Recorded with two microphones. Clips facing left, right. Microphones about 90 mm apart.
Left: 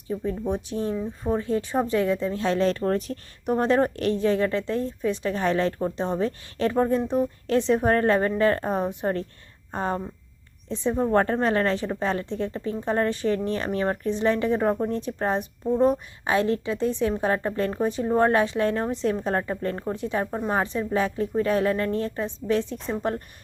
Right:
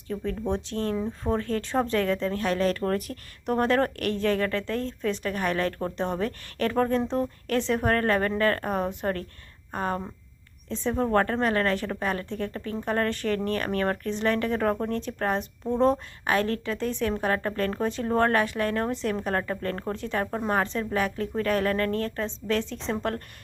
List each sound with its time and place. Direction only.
0.1 s a woman's voice: 10° left (ahead or behind)
15.6 s speech: 5° left (ahead or behind)
16.2 s a woman's voice: 20° left (ahead or behind)